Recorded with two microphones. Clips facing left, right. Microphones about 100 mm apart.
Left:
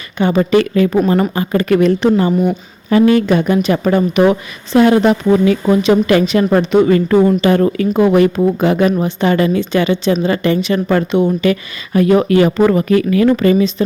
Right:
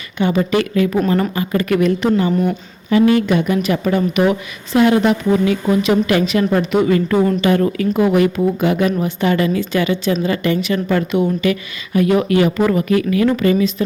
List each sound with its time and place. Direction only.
0.2 s a woman's voice: 35° left (ahead or behind)
2.3 s a woman's voice: 10° left (ahead or behind)
3.2 s a woman's voice: 35° left (ahead or behind)